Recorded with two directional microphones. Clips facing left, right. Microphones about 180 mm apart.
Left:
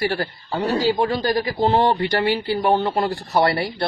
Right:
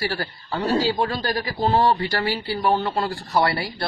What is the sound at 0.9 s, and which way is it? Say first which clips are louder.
Speech: left 4 dB; 15° left (ahead or behind).